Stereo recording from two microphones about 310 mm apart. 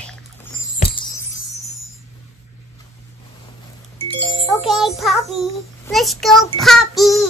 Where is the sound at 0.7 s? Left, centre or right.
Centre.